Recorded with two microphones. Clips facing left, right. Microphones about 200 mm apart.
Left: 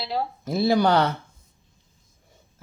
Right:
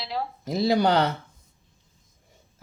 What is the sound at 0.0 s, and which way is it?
Speech, 35° left (ahead or behind).